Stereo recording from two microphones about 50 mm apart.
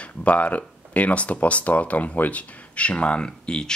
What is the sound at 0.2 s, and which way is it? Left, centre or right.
Speech, left.